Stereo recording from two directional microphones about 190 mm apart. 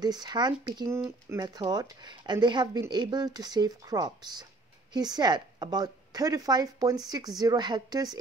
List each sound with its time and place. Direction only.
0.0 s speech: 20° right (ahead or behind)